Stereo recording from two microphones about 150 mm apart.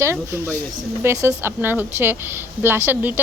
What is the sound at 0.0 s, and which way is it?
A woman's voice, 15° right (ahead or behind).